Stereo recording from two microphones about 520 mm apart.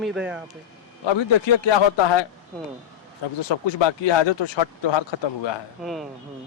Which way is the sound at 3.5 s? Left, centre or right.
Left.